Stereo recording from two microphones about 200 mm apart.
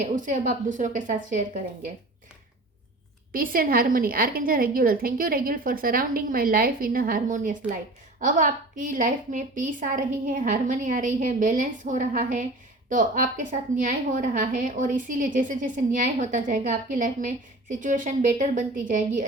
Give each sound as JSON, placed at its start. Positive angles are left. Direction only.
{"t": 0.2, "sound": "a woman's voice", "side_deg": -40}
{"t": 3.3, "sound": "a woman's voice", "side_deg": -45}